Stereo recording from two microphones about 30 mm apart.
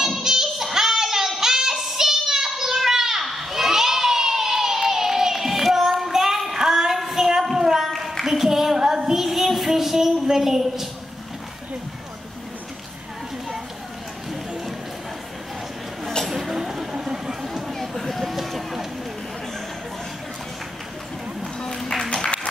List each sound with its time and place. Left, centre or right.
0.0 s child singing: centre
3.3 s children shouting: centre
4.8 s child singing: centre
7.5 s a sound: centre
8.3 s singing: centre
9.0 s child singing: centre
10.3 s a sound: centre
16.3 s a sound: centre
17.7 s run: centre
18.3 s vehicle: centre
22.1 s music: left